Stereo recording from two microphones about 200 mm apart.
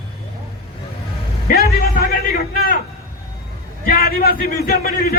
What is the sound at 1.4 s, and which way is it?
Music, 50° left (ahead or behind).